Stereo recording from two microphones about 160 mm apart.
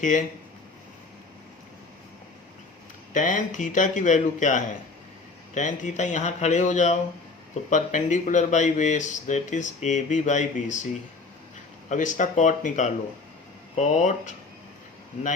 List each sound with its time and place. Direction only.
0.0 s speech: 50° left (ahead or behind)
3.1 s speech: 55° left (ahead or behind)
11.9 s speech: 55° left (ahead or behind)